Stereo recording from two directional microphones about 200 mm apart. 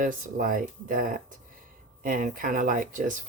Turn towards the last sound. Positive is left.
turn(degrees=-40)  # may be behind; listen again after turning